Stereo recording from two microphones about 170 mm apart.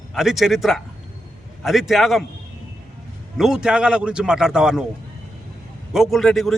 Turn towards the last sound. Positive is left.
turn(degrees=0)  # may be behind; listen again after turning